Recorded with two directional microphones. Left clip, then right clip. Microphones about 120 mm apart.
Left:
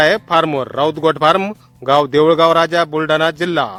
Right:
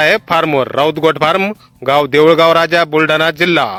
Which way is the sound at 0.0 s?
30° right (ahead or behind).